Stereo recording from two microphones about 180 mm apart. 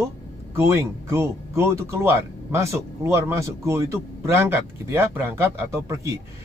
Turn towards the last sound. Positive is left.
turn(degrees=-15)  # may be behind; listen again after turning